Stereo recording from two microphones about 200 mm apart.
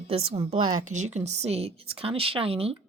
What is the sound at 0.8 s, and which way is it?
Speech, 35° right (ahead or behind).